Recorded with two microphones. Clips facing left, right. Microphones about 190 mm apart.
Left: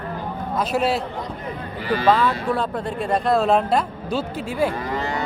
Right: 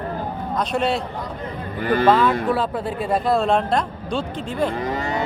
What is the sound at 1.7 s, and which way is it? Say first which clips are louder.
Speech: right 3 dB; 55° right (ahead or behind).